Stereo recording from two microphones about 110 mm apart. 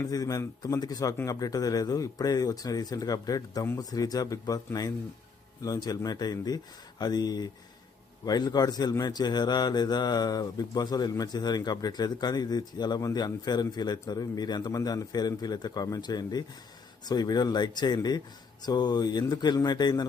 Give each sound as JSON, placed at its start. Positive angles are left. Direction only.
{"t": 0.0, "sound": "a man's voice", "side_deg": 35}